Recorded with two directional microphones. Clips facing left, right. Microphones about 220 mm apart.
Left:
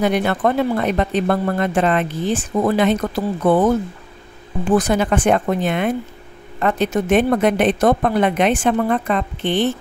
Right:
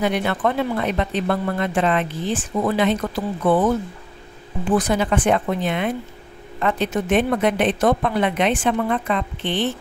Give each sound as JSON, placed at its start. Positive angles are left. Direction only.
{"t": 0.0, "sound": "speech", "side_deg": 45}
{"t": 4.7, "sound": "speech", "side_deg": 45}